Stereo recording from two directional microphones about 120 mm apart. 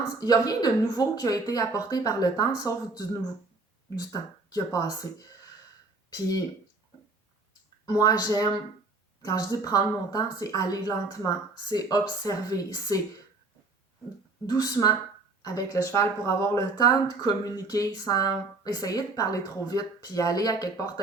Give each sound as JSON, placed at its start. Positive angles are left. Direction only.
{"t": 0.2, "sound": "speech", "side_deg": 35}
{"t": 7.9, "sound": "speech", "side_deg": 30}
{"t": 14.4, "sound": "speech", "side_deg": 30}